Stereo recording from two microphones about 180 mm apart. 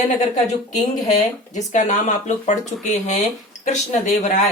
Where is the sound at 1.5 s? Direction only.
45° left (ahead or behind).